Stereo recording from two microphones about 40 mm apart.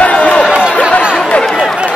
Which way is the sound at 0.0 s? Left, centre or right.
Left.